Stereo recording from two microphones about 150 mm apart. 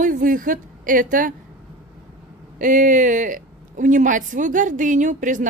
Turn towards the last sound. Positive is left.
turn(degrees=-60)  # may be behind; listen again after turning